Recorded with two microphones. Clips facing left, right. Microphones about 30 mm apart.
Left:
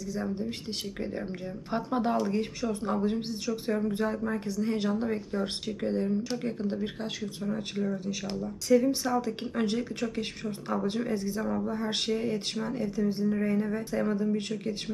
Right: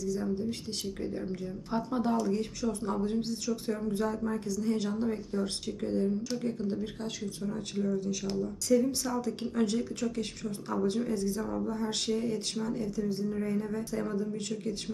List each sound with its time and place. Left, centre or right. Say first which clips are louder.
0.0 s speech: right 1 dB; centre